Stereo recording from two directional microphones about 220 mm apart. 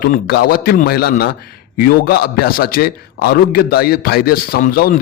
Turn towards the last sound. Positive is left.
turn(degrees=45)  # may be behind; listen again after turning